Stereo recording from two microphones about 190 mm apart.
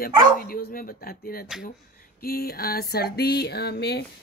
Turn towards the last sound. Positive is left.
turn(degrees=60)  # may be behind; listen again after turning